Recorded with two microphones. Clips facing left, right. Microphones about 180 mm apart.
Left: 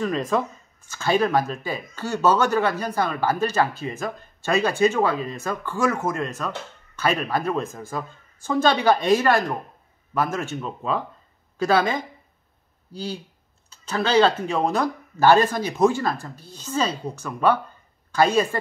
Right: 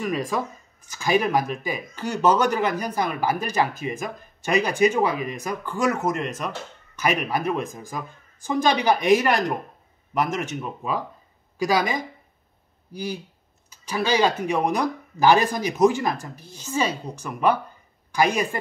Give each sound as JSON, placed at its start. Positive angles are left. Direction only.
{"t": 0.0, "sound": "speech", "side_deg": -10}